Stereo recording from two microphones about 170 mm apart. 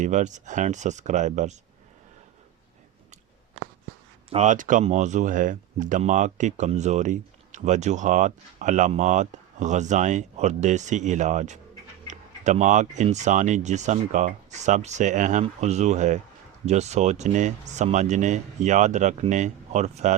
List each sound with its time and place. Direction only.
0.0 s speech: 45° right (ahead or behind)
4.3 s speech: 45° right (ahead or behind)